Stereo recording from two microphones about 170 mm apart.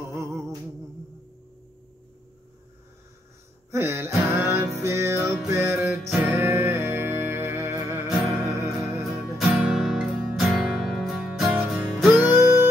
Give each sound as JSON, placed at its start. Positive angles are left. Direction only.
{"t": 0.2, "sound": "music", "side_deg": -15}
{"t": 3.7, "sound": "music", "side_deg": -15}
{"t": 9.0, "sound": "music", "side_deg": -5}